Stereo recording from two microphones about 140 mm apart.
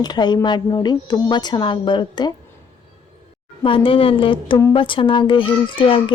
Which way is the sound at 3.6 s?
40° left (ahead or behind).